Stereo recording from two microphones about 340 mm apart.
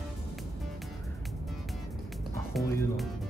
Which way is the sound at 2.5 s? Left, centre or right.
Centre.